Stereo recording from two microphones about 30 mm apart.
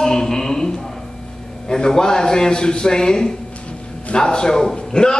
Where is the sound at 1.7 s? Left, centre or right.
Left.